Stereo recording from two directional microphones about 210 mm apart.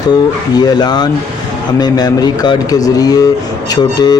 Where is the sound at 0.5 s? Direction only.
20° left (ahead or behind).